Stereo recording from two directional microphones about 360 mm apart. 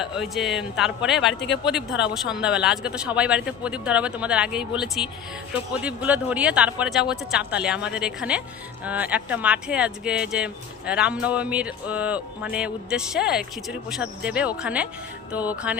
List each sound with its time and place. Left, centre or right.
0.0 s speech: centre
1.3 s speech: left
1.6 s speech: centre